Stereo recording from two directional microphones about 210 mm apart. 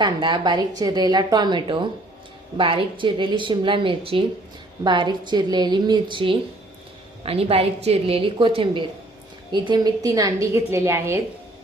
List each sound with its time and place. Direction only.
0.0 s a woman's voice: 20° right (ahead or behind)